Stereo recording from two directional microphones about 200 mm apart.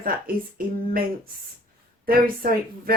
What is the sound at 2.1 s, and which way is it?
Speech, 45° right (ahead or behind).